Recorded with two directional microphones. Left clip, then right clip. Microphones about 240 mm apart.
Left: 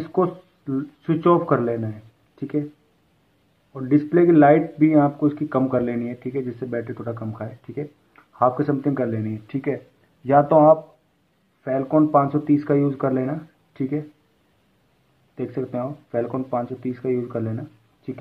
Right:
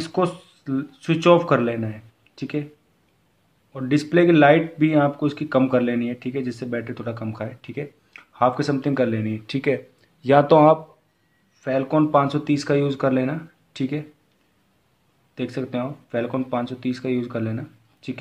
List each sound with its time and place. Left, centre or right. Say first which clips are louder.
0.0 s speech: left 1 dB; right
3.7 s speech: left 1 dB; right
15.3 s speech: even; right